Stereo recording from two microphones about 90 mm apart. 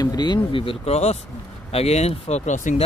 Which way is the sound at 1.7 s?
90° left.